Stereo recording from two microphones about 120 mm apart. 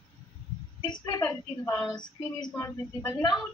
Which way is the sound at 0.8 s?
40° left (ahead or behind).